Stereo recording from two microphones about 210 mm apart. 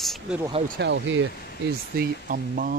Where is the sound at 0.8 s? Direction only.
55° right (ahead or behind).